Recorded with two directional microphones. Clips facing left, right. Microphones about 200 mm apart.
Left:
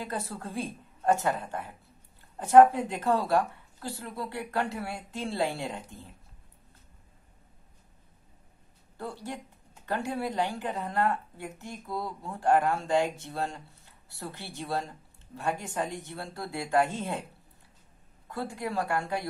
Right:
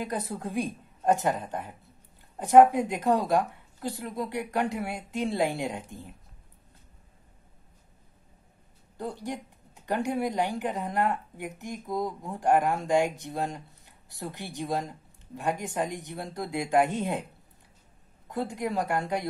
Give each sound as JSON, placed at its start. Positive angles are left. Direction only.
{"t": 0.0, "sound": "a woman's voice", "side_deg": -15}
{"t": 8.9, "sound": "a woman's voice", "side_deg": -15}
{"t": 18.3, "sound": "a woman's voice", "side_deg": -20}